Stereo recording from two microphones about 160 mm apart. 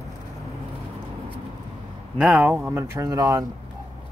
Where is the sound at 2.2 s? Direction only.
10° right (ahead or behind).